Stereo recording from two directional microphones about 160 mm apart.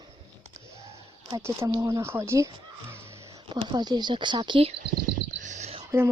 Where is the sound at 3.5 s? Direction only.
30° right (ahead or behind).